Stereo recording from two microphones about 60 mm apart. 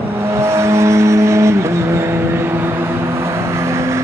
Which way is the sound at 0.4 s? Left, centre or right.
Right.